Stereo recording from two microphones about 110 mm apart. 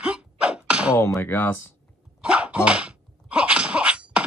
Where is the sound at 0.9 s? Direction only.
25° left (ahead or behind).